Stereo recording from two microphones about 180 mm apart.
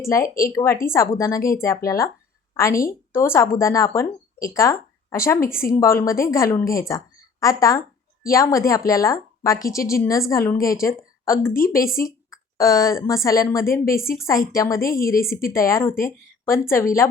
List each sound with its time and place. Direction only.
0.4 s a woman's voice: 15° left (ahead or behind)
14.8 s a woman's voice: 55° left (ahead or behind)
15.5 s a woman's voice: 15° left (ahead or behind)